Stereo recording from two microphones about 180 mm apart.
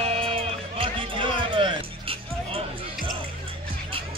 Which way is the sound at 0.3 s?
30° right (ahead or behind).